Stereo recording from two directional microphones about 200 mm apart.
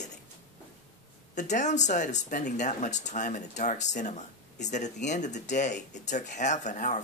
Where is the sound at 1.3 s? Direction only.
35° left (ahead or behind).